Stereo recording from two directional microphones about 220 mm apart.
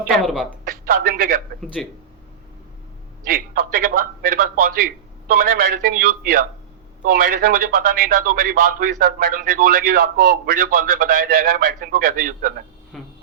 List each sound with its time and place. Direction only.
0.6 s speech: 40° right (ahead or behind)
1.8 s speech: centre (ahead or behind)
3.2 s a man's voice: 40° right (ahead or behind)
12.9 s a sound: centre (ahead or behind)